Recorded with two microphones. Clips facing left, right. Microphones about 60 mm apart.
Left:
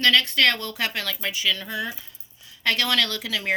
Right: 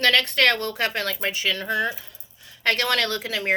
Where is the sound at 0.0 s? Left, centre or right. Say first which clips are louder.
Even; right.